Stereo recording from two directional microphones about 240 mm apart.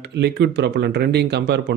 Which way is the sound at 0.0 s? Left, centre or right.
Right.